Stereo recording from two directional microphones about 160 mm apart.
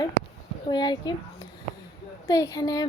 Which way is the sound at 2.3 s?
25° left (ahead or behind).